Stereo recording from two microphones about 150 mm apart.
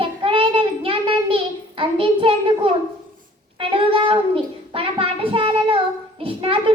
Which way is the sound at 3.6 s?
35° right (ahead or behind).